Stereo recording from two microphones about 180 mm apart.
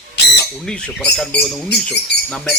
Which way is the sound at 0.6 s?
Centre (ahead or behind).